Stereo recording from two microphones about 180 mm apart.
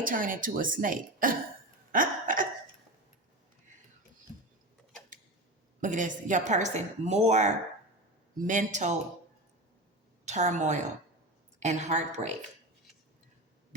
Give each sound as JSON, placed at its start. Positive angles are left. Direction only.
{"t": 0.0, "sound": "speech", "side_deg": -50}
{"t": 1.9, "sound": "hiccup", "side_deg": -50}
{"t": 5.8, "sound": "a woman's voice", "side_deg": -45}
{"t": 10.2, "sound": "a woman's voice", "side_deg": -40}